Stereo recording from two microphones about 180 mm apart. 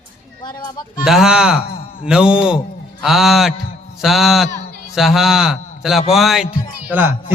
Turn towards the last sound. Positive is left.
turn(degrees=-10)  # may be behind; listen again after turning